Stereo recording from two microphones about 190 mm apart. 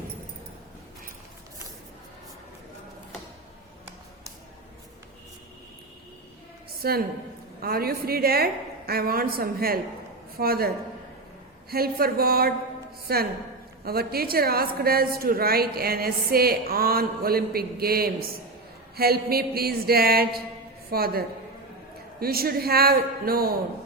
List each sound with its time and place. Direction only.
6.8 s a woman's voice: 55° right (ahead or behind)
11.7 s a woman's voice: 55° right (ahead or behind)